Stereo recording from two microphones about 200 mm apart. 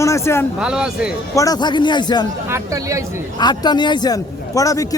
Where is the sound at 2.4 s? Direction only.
15° right (ahead or behind).